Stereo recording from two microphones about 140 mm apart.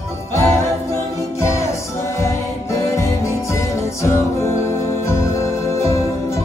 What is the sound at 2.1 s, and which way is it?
Music, 20° left (ahead or behind).